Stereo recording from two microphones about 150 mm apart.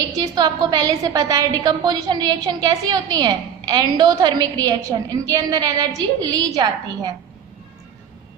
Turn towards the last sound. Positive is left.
turn(degrees=-25)  # may be behind; listen again after turning